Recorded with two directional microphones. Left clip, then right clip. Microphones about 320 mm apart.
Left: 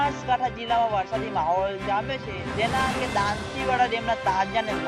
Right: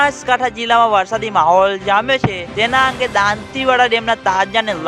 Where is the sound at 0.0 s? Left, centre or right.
Right.